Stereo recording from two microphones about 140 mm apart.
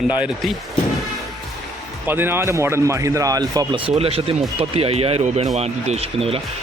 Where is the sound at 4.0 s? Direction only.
45° right (ahead or behind).